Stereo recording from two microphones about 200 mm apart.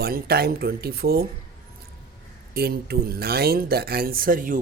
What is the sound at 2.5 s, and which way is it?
Speech, 50° right (ahead or behind).